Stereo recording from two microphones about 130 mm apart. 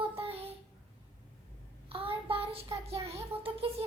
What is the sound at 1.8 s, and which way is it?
Child singing, 45° right (ahead or behind).